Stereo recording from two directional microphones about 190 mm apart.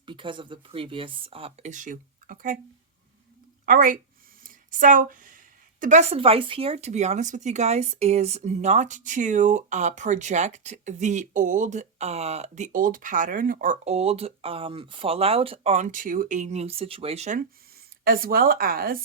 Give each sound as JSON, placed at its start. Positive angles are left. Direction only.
{"t": 0.0, "sound": "speech", "side_deg": -25}
{"t": 3.7, "sound": "speech", "side_deg": -45}
{"t": 4.4, "sound": "a sound", "side_deg": -45}
{"t": 5.8, "sound": "speech", "side_deg": -40}
{"t": 18.0, "sound": "speech", "side_deg": -50}